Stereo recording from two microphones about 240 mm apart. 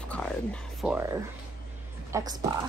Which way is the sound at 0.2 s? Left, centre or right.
Centre.